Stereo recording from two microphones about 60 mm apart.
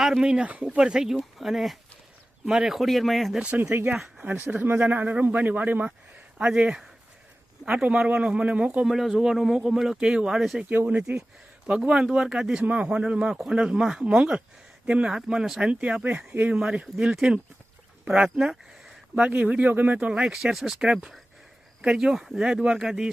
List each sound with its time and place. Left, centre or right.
0.0 s speech: centre
3.3 s speech: centre
4.4 s speech: right
6.4 s speech: centre
8.9 s speech: centre
10.8 s speech: centre
13.3 s speech: centre
15.7 s speech: right
20.3 s speech: centre